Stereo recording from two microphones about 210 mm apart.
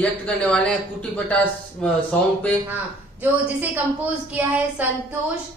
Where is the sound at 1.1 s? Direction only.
5° left (ahead or behind).